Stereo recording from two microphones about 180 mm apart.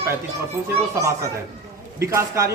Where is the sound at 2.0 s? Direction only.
15° right (ahead or behind).